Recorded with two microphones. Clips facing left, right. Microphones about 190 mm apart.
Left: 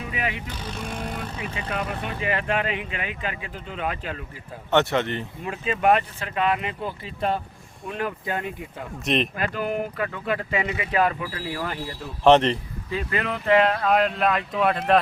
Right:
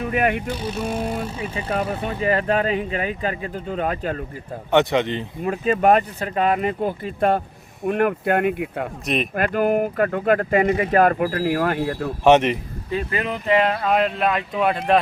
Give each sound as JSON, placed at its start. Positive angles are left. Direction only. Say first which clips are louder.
{"t": 0.0, "sound": "speech", "louder": "right 9 dB", "side_deg": -55}
{"t": 0.5, "sound": "speech", "louder": "right 8 dB", "side_deg": -10}
{"t": 1.2, "sound": "speech", "louder": "right 4 dB", "side_deg": -35}
{"t": 4.7, "sound": "speech", "louder": "right 3 dB", "side_deg": -15}
{"t": 5.4, "sound": "speech", "louder": "right 7 dB", "side_deg": -45}
{"t": 9.0, "sound": "speech", "louder": "left 1 dB", "side_deg": -5}
{"t": 9.3, "sound": "speech", "louder": "right 7 dB", "side_deg": -55}
{"t": 12.2, "sound": "speech", "louder": "right 1 dB", "side_deg": -10}